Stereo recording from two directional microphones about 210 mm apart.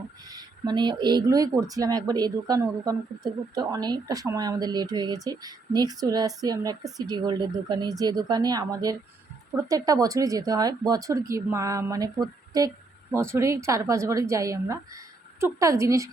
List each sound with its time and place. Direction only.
0.3 s speech: 20° right (ahead or behind)